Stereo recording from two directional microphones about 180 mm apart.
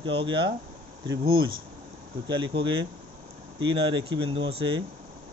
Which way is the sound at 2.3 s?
25° right (ahead or behind).